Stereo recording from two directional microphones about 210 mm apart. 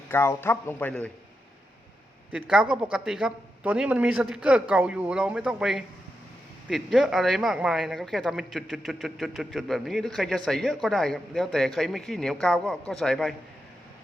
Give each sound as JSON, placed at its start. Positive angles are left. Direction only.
{"t": 0.1, "sound": "a man's voice", "side_deg": 10}
{"t": 2.3, "sound": "speech", "side_deg": -5}